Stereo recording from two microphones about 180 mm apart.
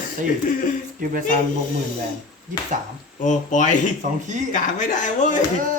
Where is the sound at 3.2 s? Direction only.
45° left (ahead or behind).